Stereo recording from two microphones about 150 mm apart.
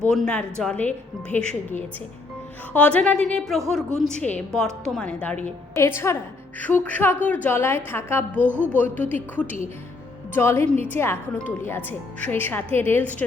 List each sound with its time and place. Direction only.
0.0 s a woman's voice: 5° left (ahead or behind)
8.4 s speech: 15° right (ahead or behind)
8.8 s a woman's voice: 10° left (ahead or behind)